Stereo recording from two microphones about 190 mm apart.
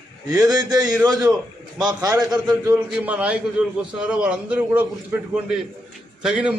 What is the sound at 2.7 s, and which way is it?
A man's voice, 10° right (ahead or behind).